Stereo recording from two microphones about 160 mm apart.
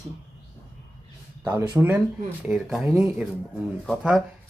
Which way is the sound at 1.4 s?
20° right (ahead or behind).